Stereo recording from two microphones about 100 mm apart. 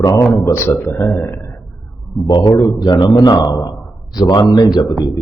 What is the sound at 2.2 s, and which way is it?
A man's voice, 45° left (ahead or behind).